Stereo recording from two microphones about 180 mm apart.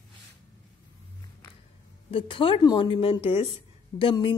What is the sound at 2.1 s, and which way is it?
A woman's voice, 30° left (ahead or behind).